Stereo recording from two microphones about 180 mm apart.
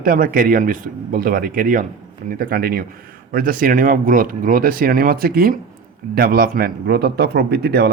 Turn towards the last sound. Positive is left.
turn(degrees=-65)  # may be behind; listen again after turning